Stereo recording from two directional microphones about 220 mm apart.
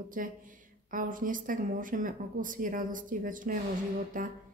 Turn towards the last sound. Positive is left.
turn(degrees=-35)  # may be behind; listen again after turning